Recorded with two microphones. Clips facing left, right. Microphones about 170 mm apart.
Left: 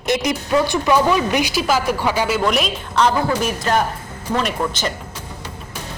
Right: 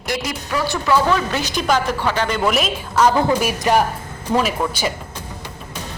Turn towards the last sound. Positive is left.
turn(degrees=-10)  # may be behind; listen again after turning